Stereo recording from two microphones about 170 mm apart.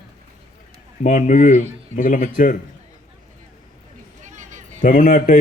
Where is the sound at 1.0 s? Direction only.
45° left (ahead or behind).